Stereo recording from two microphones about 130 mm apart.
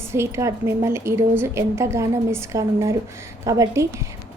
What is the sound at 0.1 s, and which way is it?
A woman's voice, 20° right (ahead or behind).